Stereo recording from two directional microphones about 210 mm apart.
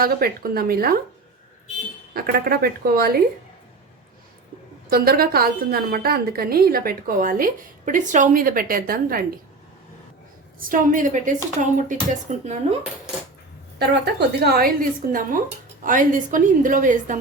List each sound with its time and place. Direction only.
0.0 s a woman's voice: 45° right (ahead or behind)
2.1 s a woman's voice: 45° right (ahead or behind)
4.9 s a woman's voice: 45° right (ahead or behind)
10.6 s a woman's voice: 40° right (ahead or behind)
13.7 s a woman's voice: 50° right (ahead or behind)